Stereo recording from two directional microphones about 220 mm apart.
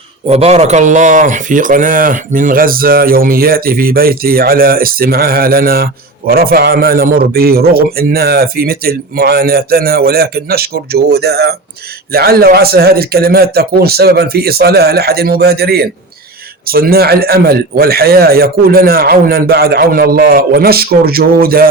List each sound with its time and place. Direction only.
0.3 s speech: 30° right (ahead or behind)